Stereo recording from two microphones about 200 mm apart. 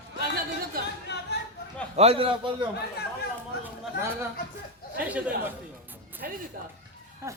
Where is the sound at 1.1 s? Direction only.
60° left (ahead or behind).